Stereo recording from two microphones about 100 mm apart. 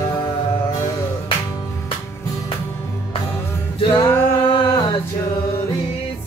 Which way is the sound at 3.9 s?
20° left (ahead or behind).